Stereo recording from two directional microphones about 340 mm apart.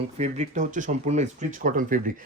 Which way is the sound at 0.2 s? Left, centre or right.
Right.